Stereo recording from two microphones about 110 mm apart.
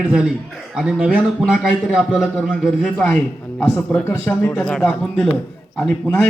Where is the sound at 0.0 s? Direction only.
10° right (ahead or behind).